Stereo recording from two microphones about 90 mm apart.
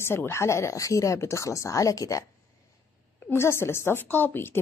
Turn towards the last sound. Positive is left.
turn(degrees=25)  # may be behind; listen again after turning